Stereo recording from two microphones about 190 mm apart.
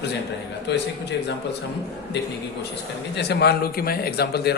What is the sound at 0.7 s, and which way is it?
Speech, 65° left (ahead or behind).